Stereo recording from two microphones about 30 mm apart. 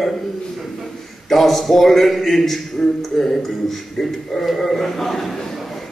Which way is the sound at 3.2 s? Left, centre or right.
Centre.